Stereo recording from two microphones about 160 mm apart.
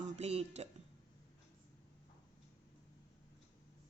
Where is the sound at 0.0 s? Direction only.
40° right (ahead or behind).